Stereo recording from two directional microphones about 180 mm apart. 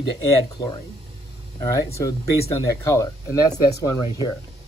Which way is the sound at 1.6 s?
20° left (ahead or behind).